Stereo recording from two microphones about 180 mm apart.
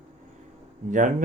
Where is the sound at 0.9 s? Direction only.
45° right (ahead or behind).